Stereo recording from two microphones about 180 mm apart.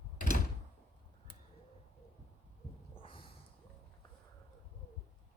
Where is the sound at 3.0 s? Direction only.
30° left (ahead or behind).